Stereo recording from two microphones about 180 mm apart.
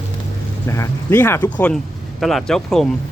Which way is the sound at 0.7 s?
15° left (ahead or behind).